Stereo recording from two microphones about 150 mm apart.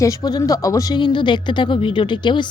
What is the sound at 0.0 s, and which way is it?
A woman's voice, 20° left (ahead or behind).